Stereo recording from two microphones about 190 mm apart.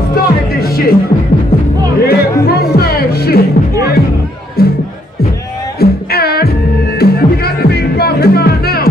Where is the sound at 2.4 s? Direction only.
55° left (ahead or behind).